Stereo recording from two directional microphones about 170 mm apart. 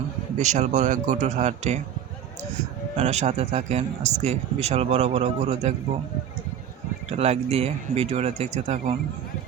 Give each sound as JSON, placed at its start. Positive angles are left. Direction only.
{"t": 0.3, "sound": "speech", "side_deg": -45}
{"t": 3.0, "sound": "speech", "side_deg": -40}
{"t": 7.1, "sound": "speech", "side_deg": -40}